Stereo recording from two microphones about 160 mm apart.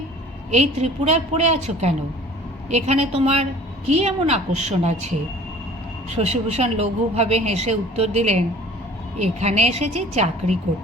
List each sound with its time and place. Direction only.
0.5 s a woman's voice: 40° right (ahead or behind)